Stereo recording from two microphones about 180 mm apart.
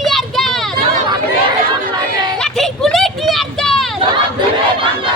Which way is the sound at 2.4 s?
Centre (ahead or behind).